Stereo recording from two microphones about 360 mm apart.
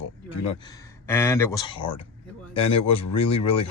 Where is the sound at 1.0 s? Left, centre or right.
Centre.